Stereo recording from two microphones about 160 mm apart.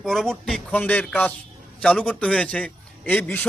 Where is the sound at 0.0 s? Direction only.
Centre (ahead or behind).